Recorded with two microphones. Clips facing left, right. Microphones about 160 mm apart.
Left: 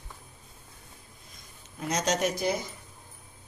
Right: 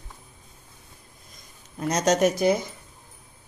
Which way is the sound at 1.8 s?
45° right (ahead or behind).